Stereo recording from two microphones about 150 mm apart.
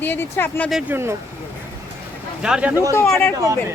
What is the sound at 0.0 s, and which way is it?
Speech, 15° left (ahead or behind).